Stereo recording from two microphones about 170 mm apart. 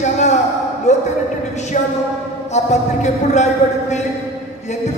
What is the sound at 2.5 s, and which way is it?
Speech, 40° left (ahead or behind).